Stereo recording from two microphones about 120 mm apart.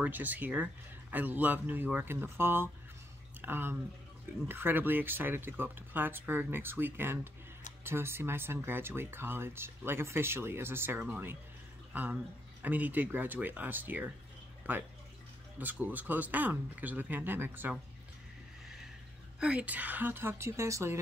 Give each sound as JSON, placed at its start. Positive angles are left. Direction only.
{"t": 0.0, "sound": "speech", "side_deg": -15}
{"t": 15.6, "sound": "speech", "side_deg": -15}
{"t": 19.4, "sound": "speech", "side_deg": -10}